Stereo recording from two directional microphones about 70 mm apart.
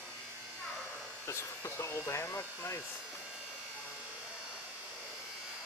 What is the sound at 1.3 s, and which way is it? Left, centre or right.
Speech, left.